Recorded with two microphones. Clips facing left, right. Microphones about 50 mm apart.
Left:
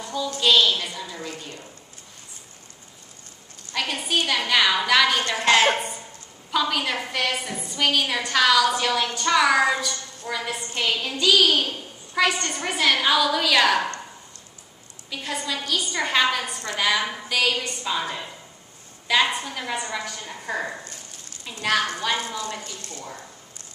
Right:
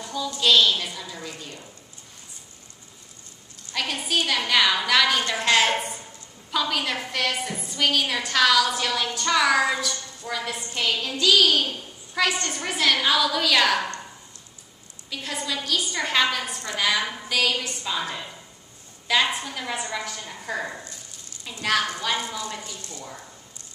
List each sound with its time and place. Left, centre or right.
0.0 s a sound: centre
0.4 s a woman's voice: centre
3.7 s a woman's voice: centre
15.0 s a woman's voice: centre
22.6 s speech: right
22.8 s speech: left